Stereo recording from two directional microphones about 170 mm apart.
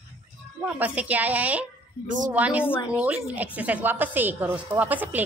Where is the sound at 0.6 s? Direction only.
10° right (ahead or behind).